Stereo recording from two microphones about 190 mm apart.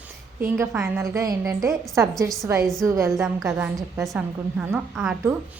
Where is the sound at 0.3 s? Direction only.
15° right (ahead or behind).